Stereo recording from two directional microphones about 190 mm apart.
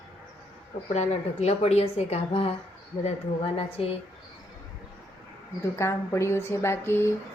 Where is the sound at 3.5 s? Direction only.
30° left (ahead or behind).